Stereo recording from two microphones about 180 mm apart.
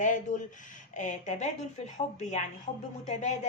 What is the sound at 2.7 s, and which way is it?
Speech, 40° left (ahead or behind).